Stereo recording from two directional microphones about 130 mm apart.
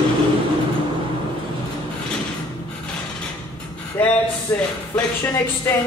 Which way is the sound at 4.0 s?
10° left (ahead or behind).